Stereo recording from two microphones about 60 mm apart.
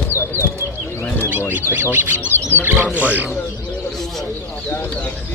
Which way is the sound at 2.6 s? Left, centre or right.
Right.